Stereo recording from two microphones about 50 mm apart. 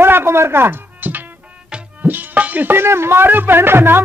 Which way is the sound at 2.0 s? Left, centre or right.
Right.